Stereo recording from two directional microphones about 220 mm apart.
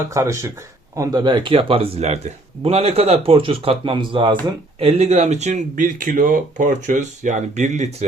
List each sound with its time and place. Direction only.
0.1 s speech: 15° right (ahead or behind); by 7.9 s 30° right (ahead or behind)